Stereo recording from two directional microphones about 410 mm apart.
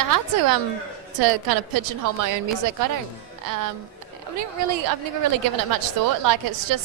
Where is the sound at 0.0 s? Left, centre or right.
Right.